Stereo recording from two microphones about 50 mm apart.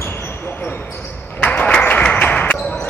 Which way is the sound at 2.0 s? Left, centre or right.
Left.